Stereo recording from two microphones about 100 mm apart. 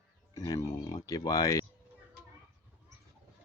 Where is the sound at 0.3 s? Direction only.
35° left (ahead or behind).